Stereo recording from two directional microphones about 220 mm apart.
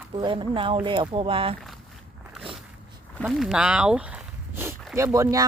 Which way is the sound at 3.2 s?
Centre (ahead or behind).